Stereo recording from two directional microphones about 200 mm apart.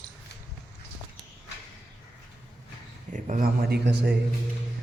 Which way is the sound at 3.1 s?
40° right (ahead or behind).